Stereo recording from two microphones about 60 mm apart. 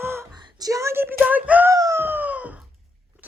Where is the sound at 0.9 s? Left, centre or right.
Right.